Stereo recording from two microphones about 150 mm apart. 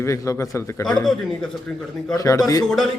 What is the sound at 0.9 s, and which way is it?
Speech, 5° left (ahead or behind).